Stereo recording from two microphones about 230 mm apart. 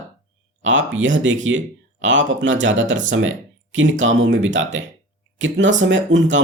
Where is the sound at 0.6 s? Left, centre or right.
Right.